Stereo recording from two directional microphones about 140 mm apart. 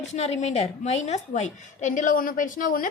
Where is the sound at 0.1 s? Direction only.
55° left (ahead or behind).